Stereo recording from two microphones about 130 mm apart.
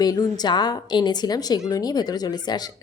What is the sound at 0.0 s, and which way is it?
A woman's voice, 30° left (ahead or behind).